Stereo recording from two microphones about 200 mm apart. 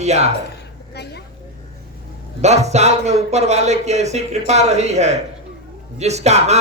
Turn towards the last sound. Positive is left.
turn(degrees=-35)  # may be behind; listen again after turning